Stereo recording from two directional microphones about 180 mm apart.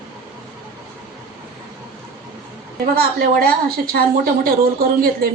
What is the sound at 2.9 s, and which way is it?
A woman's voice, 55° right (ahead or behind).